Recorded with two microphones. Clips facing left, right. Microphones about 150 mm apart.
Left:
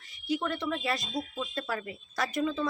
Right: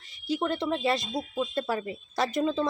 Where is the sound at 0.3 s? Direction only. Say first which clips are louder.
Right 3 dB; 30° right (ahead or behind).